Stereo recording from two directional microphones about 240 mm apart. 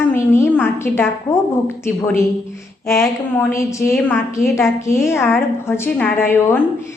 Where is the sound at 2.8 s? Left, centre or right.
Centre.